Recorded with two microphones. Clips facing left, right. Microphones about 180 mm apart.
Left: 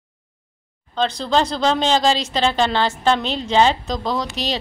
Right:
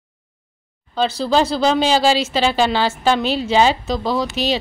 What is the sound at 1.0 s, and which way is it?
Speech, 5° right (ahead or behind).